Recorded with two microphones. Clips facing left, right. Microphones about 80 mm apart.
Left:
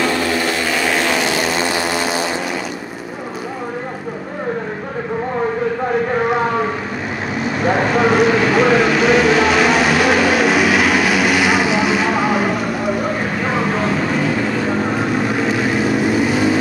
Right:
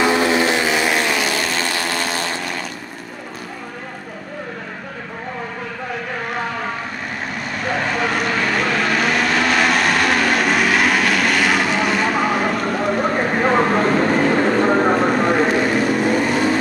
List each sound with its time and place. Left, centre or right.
0.0 s vehicle: centre
1.2 s vehicle: centre
8.1 s vehicle: centre
13.4 s vehicle: right
13.7 s vehicle: centre
14.3 s vehicle: right
15.5 s vehicle: centre